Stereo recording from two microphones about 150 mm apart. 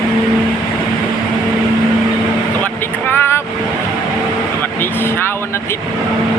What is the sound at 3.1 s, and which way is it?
Vehicle, 15° left (ahead or behind).